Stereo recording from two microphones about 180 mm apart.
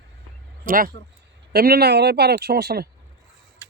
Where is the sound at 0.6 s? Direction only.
50° right (ahead or behind).